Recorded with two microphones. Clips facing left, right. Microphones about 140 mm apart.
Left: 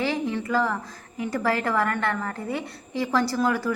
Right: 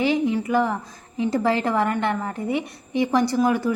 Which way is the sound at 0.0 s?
20° right (ahead or behind).